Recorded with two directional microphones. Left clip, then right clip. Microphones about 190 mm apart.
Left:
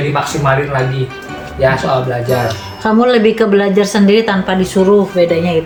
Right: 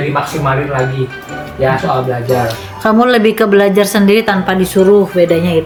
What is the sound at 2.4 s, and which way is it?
Speech, 30° right (ahead or behind).